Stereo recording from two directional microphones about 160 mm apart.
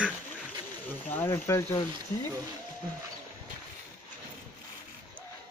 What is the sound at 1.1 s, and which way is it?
Speech, 15° left (ahead or behind).